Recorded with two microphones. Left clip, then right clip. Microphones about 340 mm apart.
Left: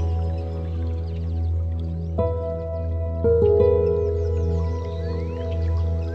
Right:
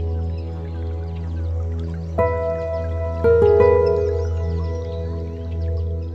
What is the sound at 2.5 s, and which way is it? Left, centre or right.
Music, right.